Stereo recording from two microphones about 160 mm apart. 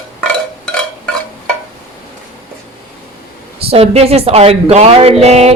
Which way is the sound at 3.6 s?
40° right (ahead or behind).